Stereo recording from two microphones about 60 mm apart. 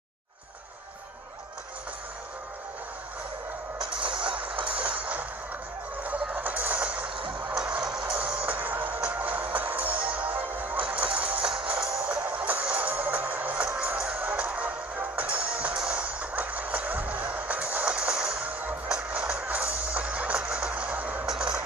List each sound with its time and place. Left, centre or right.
3.7 s music: centre
4.7 s music: right
6.3 s music: right
20.3 s a sound: centre